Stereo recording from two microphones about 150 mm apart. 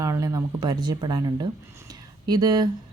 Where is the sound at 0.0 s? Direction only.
20° right (ahead or behind).